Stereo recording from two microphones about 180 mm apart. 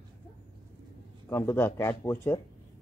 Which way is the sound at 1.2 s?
15° left (ahead or behind).